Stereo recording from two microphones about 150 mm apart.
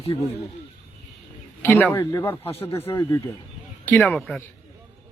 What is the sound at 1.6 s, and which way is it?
Speech, 15° left (ahead or behind).